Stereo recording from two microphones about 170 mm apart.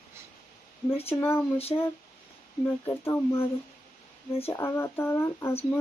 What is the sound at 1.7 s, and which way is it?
Speech, 30° left (ahead or behind).